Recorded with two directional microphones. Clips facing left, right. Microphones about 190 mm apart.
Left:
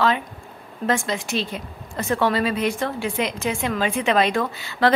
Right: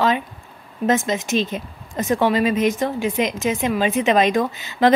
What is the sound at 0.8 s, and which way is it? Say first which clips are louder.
A woman's voice: right 4 dB; 20° right (ahead or behind).